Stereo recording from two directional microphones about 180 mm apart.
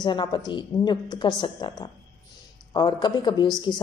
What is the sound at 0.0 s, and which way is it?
A woman's voice, 25° left (ahead or behind).